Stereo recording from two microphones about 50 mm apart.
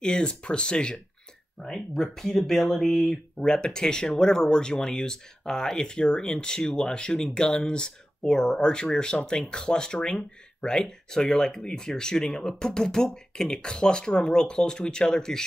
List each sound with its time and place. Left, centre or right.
0.0 s speech: centre
1.6 s speech: centre